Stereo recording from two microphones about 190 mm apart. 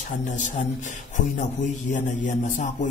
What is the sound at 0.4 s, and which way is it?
A man's voice, 40° left (ahead or behind).